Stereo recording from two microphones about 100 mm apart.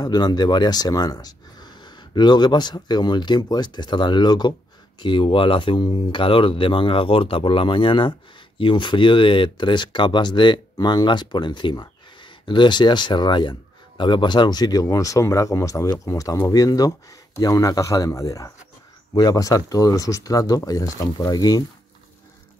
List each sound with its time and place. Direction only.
0.0 s speech: 45° left (ahead or behind)